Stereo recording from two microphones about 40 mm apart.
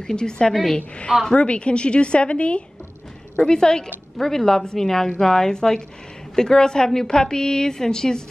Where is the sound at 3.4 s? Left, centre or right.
Centre.